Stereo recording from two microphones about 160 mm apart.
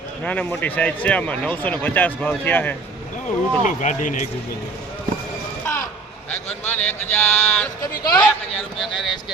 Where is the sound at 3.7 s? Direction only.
55° left (ahead or behind).